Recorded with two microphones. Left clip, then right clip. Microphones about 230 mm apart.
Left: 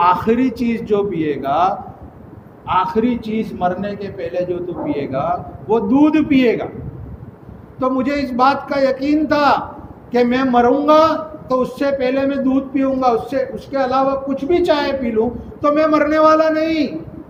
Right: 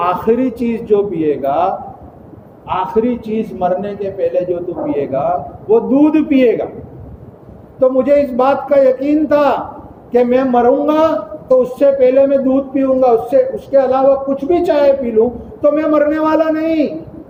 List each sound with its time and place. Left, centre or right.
0.0 s a man's voice: left
7.8 s a man's voice: left